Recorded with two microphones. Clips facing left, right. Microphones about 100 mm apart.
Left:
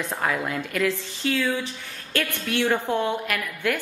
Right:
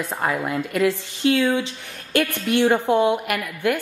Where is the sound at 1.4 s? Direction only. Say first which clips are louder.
Right 5 dB; 20° right (ahead or behind).